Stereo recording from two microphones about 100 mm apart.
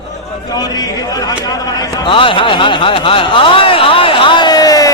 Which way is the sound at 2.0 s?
60° left (ahead or behind).